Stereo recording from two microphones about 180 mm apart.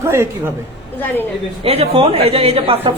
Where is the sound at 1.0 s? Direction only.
10° left (ahead or behind).